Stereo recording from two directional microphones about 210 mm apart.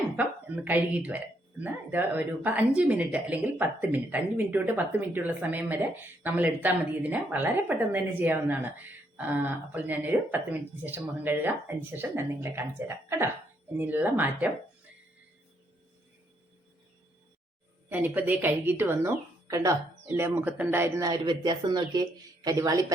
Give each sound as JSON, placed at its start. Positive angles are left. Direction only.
{"t": 0.2, "sound": "speech", "side_deg": -10}
{"t": 17.8, "sound": "speech", "side_deg": -10}